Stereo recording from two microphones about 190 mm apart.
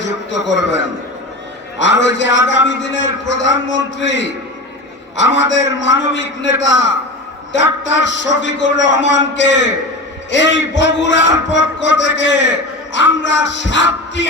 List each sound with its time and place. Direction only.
1.8 s a man's voice: 70° left (ahead or behind)